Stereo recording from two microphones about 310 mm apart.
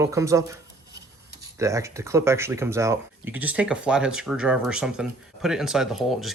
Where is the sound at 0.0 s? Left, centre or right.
Centre.